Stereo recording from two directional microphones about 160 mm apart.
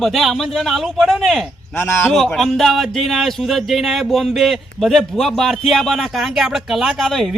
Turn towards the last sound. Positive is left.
turn(degrees=0)  # may be behind; listen again after turning